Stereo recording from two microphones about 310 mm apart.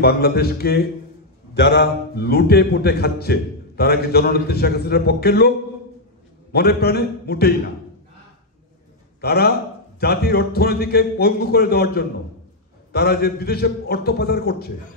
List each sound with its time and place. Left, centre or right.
0.0 s a man's voice: left
6.5 s a man's voice: left
9.2 s a man's voice: left